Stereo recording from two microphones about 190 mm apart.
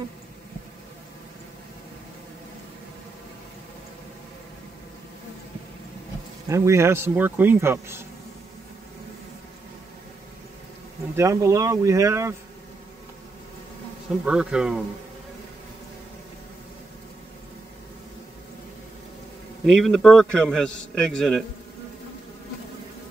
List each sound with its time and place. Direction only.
6.4 s speech: 15° right (ahead or behind)
11.1 s speech: 15° right (ahead or behind)
14.2 s a man's voice: 5° right (ahead or behind)
19.6 s a man's voice: centre (ahead or behind)